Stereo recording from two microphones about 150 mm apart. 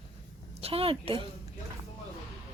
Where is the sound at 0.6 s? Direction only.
40° right (ahead or behind).